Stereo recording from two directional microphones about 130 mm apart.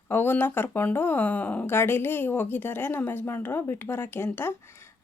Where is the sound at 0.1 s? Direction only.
15° left (ahead or behind).